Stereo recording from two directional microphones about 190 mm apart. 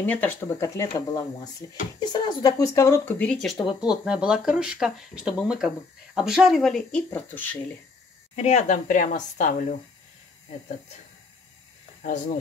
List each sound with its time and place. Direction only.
0.0 s speech: 10° left (ahead or behind)
8.4 s a woman's voice: 35° left (ahead or behind)